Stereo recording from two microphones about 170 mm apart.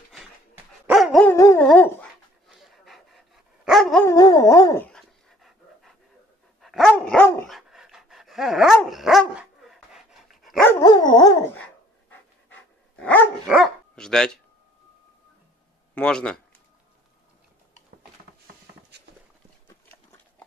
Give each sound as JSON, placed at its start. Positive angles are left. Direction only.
{"t": 0.8, "sound": "dog", "side_deg": 0}
{"t": 1.2, "sound": "dog", "side_deg": 15}
{"t": 4.0, "sound": "dog", "side_deg": 20}
{"t": 4.9, "sound": "dog", "side_deg": 0}
{"t": 7.4, "sound": "dog", "side_deg": 0}
{"t": 10.7, "sound": "dog", "side_deg": 20}
{"t": 12.1, "sound": "dog", "side_deg": 10}
{"t": 15.9, "sound": "a sound", "side_deg": 5}
{"t": 19.7, "sound": "horse", "side_deg": 20}